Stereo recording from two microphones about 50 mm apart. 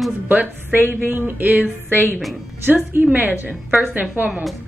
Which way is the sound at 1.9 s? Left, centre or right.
Left.